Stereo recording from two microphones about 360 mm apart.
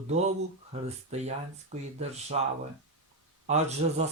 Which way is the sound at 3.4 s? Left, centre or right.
Centre.